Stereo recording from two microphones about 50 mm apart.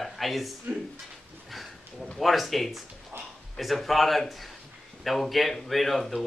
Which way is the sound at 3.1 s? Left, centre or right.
Right.